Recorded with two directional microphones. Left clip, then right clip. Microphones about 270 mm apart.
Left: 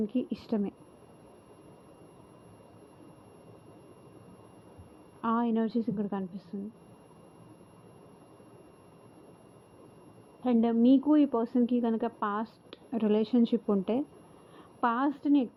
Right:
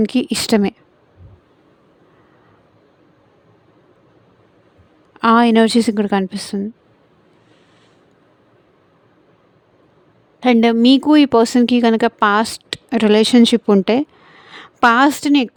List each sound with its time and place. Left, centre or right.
0.0 s a woman's voice: right
5.2 s a woman's voice: right
10.4 s a woman's voice: right